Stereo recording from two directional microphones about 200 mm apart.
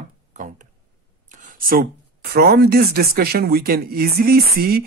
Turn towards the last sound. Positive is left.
turn(degrees=-50)  # may be behind; listen again after turning